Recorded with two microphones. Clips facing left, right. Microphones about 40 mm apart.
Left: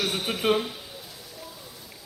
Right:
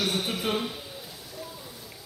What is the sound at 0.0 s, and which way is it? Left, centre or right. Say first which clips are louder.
Speech: even; centre.